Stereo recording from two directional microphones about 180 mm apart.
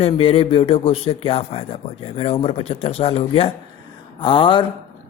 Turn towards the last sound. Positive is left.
turn(degrees=30)  # may be behind; listen again after turning